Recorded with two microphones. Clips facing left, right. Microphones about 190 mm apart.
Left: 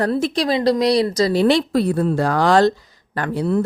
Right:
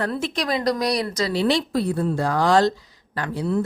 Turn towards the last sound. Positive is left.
turn(degrees=60)  # may be behind; listen again after turning